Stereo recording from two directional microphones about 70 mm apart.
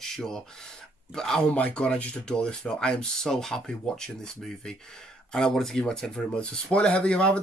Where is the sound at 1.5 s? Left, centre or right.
Centre.